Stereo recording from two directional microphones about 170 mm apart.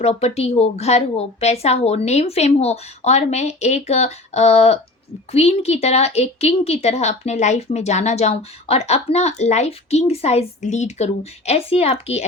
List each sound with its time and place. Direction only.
0.0 s a woman's voice: 40° left (ahead or behind)